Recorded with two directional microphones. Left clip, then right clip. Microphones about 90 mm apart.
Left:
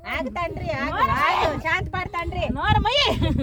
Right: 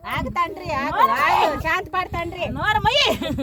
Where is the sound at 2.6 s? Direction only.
5° right (ahead or behind).